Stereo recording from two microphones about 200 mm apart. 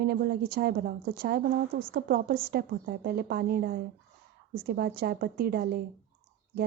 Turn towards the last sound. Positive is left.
turn(degrees=-50)  # may be behind; listen again after turning